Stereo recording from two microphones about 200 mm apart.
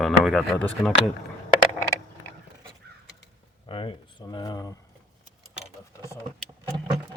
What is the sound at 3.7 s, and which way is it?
Speech, 25° left (ahead or behind).